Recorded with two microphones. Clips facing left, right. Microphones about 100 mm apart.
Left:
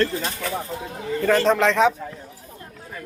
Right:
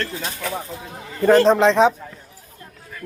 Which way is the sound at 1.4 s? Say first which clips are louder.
Right 3 dB; 25° right (ahead or behind).